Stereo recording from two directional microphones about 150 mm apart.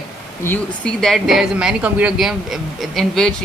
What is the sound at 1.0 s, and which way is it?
A man's voice, centre (ahead or behind).